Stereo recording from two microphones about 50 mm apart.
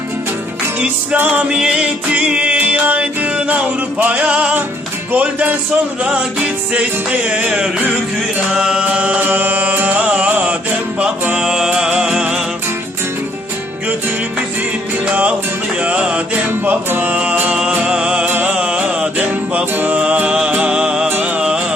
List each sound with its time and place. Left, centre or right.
1.4 s music: centre
8.5 s music: centre
8.8 s music: right
11.3 s music: centre
15.1 s music: right
16.3 s music: right
17.5 s music: right
19.7 s music: right
20.0 s music: right
21.1 s music: right